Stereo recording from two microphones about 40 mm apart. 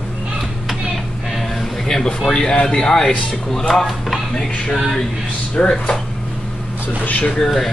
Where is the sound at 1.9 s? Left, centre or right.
Centre.